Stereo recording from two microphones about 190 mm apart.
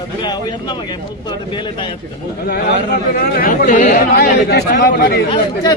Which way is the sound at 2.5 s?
55° left (ahead or behind).